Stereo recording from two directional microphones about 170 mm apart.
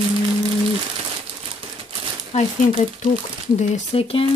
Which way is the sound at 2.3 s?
40° left (ahead or behind).